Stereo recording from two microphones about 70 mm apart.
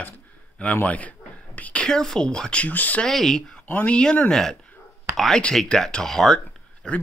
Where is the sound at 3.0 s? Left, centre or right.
Centre.